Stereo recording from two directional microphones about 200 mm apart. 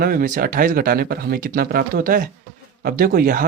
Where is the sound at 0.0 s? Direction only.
45° right (ahead or behind).